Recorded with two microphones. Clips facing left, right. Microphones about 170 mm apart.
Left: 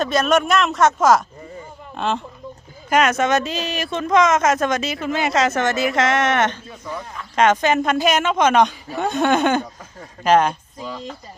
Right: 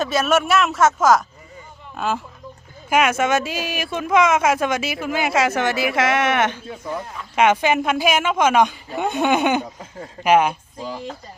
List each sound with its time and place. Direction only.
0.0 s speech: 5° right (ahead or behind)